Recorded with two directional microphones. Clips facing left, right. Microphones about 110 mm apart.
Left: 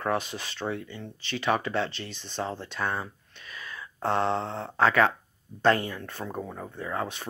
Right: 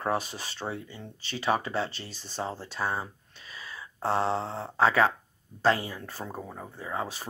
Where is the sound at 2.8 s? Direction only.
20° right (ahead or behind).